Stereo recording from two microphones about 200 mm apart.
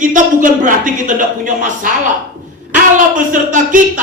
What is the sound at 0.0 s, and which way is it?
A man's voice, 40° right (ahead or behind).